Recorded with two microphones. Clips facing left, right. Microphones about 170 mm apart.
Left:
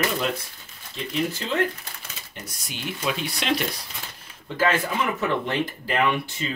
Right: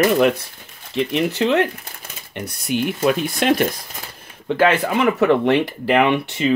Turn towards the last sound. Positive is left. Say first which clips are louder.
# right 8 dB
turn(degrees=-70)  # may be behind; listen again after turning